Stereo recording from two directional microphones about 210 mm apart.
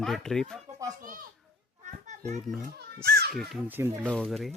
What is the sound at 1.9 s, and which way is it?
Children playing, 35° right (ahead or behind).